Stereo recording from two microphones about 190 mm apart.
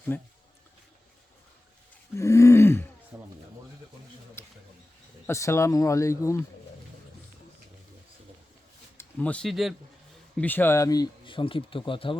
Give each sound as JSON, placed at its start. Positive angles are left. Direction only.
{"t": 0.1, "sound": "speech", "side_deg": 10}
{"t": 2.1, "sound": "speech", "side_deg": 15}
{"t": 3.1, "sound": "a sound", "side_deg": -10}
{"t": 4.4, "sound": "a sound", "side_deg": 10}
{"t": 5.2, "sound": "speech", "side_deg": 15}
{"t": 9.0, "sound": "speech", "side_deg": 5}